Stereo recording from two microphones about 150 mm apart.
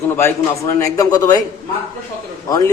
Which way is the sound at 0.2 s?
20° left (ahead or behind).